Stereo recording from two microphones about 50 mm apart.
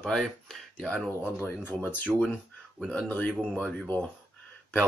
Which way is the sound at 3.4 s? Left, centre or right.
Centre.